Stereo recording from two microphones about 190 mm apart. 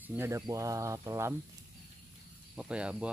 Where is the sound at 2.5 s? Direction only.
5° right (ahead or behind).